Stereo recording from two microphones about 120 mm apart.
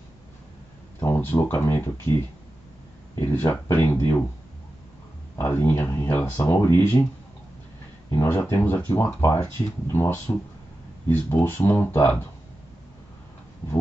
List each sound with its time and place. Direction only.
0.9 s speech: 15° left (ahead or behind)
5.4 s speech: 15° left (ahead or behind)
8.1 s speech: 20° left (ahead or behind)